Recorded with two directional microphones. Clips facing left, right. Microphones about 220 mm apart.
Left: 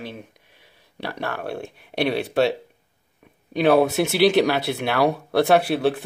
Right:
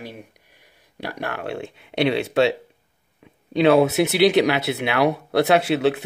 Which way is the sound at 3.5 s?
20° right (ahead or behind).